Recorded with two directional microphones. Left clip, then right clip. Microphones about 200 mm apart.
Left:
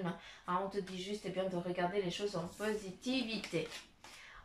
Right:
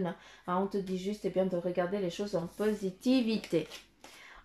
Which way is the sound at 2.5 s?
35° right (ahead or behind).